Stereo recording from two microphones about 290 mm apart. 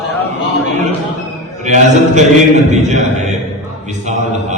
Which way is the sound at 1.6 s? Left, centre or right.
Right.